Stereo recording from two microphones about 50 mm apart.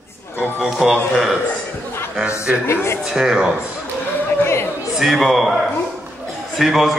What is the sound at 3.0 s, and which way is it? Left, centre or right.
Speech, centre.